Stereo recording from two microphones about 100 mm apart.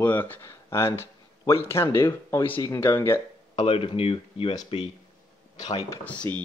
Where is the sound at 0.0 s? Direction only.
20° left (ahead or behind).